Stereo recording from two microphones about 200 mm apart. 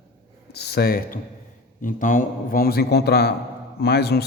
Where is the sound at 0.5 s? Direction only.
55° left (ahead or behind).